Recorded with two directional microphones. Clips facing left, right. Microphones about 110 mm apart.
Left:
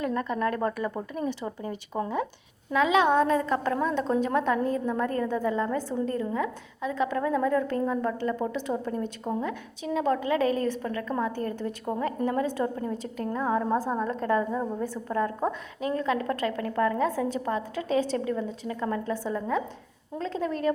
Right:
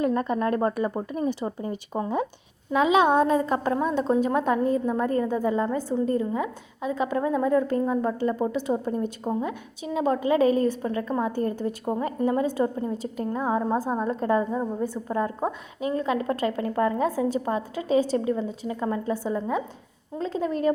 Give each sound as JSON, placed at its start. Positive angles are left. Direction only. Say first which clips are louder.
{"t": 0.0, "sound": "a woman's voice", "louder": "right 4 dB", "side_deg": -25}
{"t": 8.7, "sound": "a woman's voice", "louder": "right 4 dB", "side_deg": -20}
{"t": 17.1, "sound": "a woman's voice", "louder": "right 3 dB", "side_deg": -5}